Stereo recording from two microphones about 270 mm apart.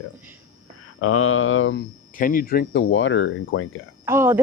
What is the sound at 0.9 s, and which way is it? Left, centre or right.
Speech, left.